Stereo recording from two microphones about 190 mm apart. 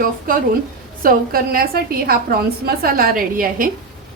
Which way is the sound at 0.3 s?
45° right (ahead or behind).